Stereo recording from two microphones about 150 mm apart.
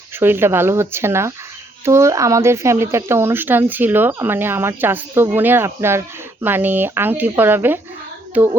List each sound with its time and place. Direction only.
0.2 s speech: 15° right (ahead or behind)